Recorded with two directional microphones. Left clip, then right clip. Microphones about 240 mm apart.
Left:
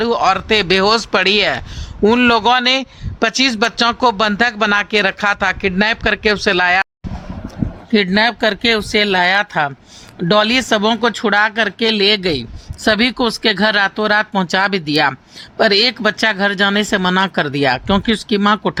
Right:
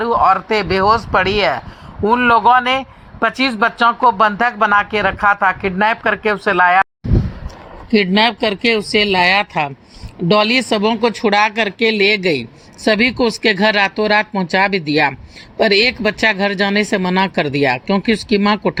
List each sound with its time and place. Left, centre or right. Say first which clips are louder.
0.0 s a man's voice: right 2 dB; left
8.1 s speech: even; centre